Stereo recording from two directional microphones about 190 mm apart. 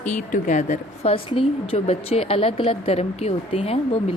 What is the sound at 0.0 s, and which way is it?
A woman's voice, 40° left (ahead or behind).